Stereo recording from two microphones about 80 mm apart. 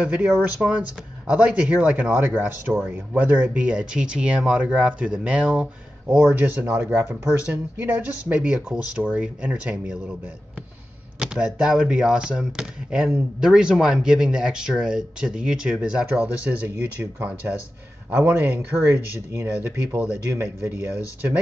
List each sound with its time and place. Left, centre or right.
0.0 s speech: centre
11.1 s speech: centre
19.3 s speech: right
20.0 s speech: centre